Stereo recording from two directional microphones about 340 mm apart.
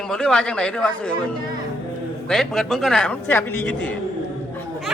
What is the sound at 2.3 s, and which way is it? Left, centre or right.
Speech, centre.